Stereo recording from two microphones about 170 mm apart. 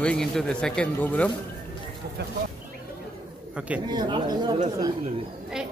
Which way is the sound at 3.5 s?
10° right (ahead or behind).